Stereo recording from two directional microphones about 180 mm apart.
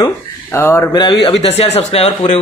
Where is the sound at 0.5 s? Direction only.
15° left (ahead or behind); by 2.3 s 35° left (ahead or behind).